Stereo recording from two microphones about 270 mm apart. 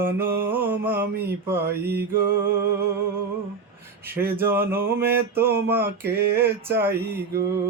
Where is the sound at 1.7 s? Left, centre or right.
Right.